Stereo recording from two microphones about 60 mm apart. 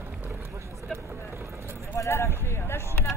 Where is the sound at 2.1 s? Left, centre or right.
Left.